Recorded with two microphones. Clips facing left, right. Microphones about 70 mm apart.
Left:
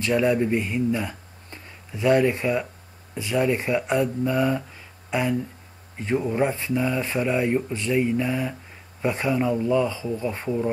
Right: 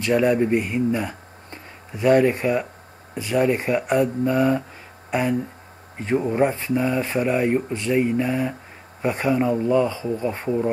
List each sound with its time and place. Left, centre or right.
0.0 s speech: centre